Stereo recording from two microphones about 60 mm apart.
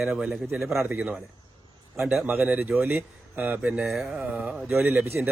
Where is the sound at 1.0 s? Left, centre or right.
Right.